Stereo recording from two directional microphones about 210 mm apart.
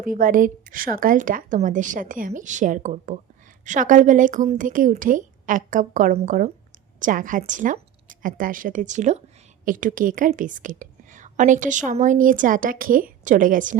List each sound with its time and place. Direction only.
0.0 s a woman's voice: 40° right (ahead or behind)